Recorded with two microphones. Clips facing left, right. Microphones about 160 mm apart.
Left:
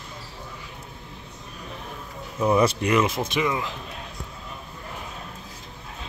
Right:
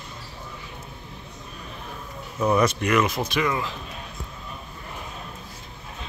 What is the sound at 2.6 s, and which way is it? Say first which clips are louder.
Speech: left 1 dB; 30° left (ahead or behind).